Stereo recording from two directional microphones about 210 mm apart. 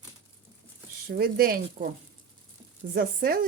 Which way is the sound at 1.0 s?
45° right (ahead or behind).